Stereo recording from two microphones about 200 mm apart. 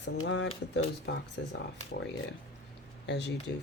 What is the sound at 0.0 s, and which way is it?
A woman's voice, 65° left (ahead or behind).